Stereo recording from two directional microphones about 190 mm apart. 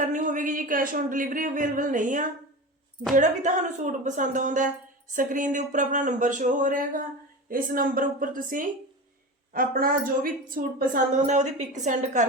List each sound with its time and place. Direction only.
0.0 s a woman's voice: 40° right (ahead or behind)